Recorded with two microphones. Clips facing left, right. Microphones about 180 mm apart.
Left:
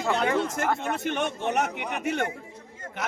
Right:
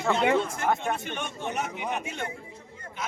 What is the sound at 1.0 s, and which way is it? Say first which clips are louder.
A man's voice: left 6 dB; 65° left (ahead or behind).